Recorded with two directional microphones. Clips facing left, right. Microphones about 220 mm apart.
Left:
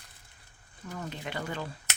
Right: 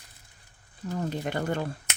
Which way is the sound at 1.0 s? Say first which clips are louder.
Right 7 dB; 45° right (ahead or behind).